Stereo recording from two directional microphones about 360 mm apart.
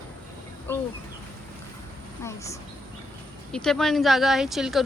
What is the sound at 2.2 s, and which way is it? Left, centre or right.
A woman's voice, centre.